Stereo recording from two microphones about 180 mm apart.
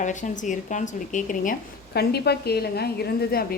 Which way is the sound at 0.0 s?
45° left (ahead or behind).